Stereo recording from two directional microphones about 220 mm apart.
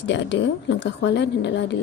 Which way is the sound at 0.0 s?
55° left (ahead or behind).